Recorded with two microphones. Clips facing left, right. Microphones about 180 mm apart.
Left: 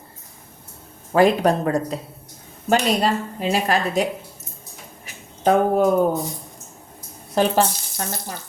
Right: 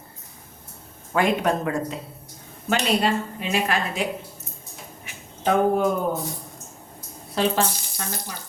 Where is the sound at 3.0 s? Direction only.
40° left (ahead or behind).